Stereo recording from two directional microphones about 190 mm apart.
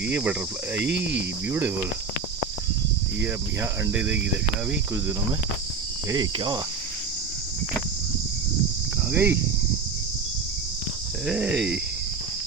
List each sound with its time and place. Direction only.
0.1 s cricket: 5° right (ahead or behind)
0.8 s speech: 65° right (ahead or behind)
1.5 s cricket: 10° right (ahead or behind)
3.6 s cricket: 10° right (ahead or behind)
6.1 s cricket: 20° right (ahead or behind)
9.1 s cricket: 10° right (ahead or behind)
11.3 s cricket: 5° right (ahead or behind)